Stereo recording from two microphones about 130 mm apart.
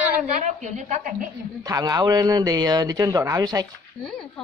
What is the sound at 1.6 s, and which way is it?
Speech, 30° right (ahead or behind).